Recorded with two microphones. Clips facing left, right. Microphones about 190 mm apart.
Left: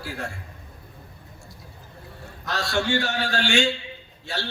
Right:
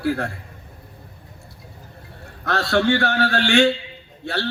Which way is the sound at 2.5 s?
60° right (ahead or behind).